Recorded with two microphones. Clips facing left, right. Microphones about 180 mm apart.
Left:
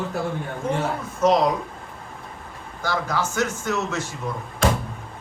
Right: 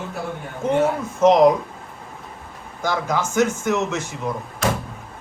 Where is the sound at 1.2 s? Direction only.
20° right (ahead or behind).